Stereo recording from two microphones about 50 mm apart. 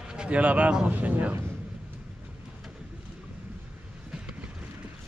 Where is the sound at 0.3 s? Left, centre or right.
Right.